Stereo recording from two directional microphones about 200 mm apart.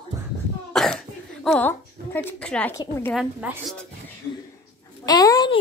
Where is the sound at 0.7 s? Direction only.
Centre (ahead or behind).